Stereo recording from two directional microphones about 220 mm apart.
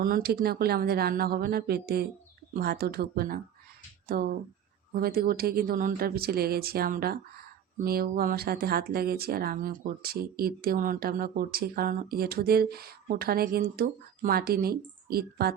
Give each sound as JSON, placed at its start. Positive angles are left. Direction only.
{"t": 0.0, "sound": "speech", "side_deg": -45}